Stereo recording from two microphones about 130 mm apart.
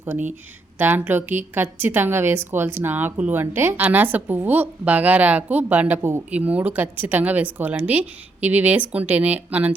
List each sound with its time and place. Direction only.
0.8 s a woman's voice: 15° right (ahead or behind)